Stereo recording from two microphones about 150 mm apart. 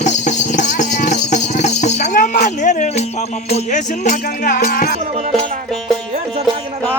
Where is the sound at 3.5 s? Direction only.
55° left (ahead or behind).